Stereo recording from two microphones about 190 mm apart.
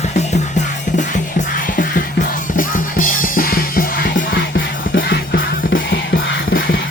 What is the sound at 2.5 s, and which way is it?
Music, 45° left (ahead or behind).